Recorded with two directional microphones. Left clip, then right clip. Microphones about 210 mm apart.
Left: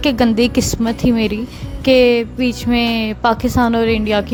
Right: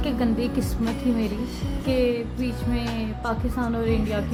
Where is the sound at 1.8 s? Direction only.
45° left (ahead or behind).